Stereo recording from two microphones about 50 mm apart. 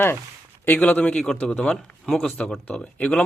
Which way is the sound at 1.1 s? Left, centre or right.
Centre.